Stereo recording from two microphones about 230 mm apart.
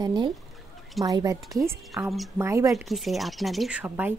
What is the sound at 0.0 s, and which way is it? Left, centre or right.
A woman's voice, centre.